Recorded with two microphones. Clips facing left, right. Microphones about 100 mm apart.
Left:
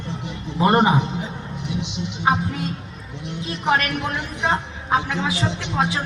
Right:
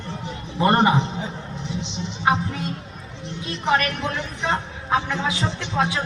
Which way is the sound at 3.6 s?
15° left (ahead or behind).